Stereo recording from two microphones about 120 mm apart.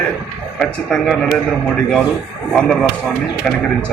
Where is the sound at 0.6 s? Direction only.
Centre (ahead or behind).